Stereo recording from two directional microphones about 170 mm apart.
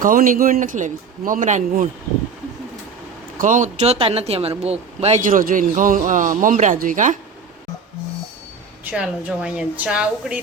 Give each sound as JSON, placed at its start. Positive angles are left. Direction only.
{"t": 0.0, "sound": "speech", "side_deg": -55}
{"t": 3.3, "sound": "speech", "side_deg": -50}
{"t": 8.8, "sound": "speech", "side_deg": -10}